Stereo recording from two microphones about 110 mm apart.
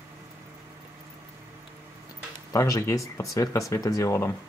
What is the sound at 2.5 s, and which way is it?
Speech, 30° left (ahead or behind).